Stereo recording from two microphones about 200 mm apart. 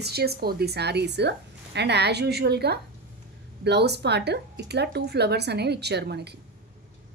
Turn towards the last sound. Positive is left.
turn(degrees=-55)  # may be behind; listen again after turning